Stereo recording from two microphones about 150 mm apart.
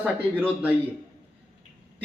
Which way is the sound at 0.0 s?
10° right (ahead or behind).